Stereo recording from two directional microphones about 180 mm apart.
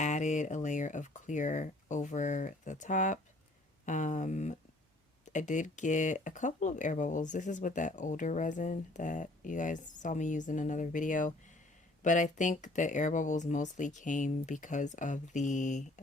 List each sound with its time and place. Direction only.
0.0 s speech: 40° left (ahead or behind)